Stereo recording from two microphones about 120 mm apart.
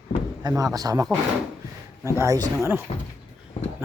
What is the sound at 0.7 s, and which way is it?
Speech, 30° right (ahead or behind).